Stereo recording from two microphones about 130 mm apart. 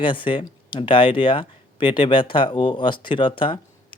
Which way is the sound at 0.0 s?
40° left (ahead or behind).